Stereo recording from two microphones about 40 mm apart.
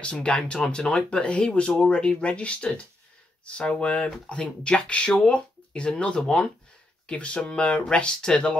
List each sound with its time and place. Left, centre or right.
0.0 s speech: left